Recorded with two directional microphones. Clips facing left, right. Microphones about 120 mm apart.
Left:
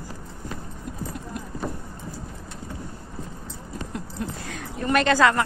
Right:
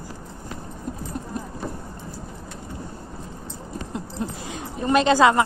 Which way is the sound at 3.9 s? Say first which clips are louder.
Right 3 dB; 25° right (ahead or behind).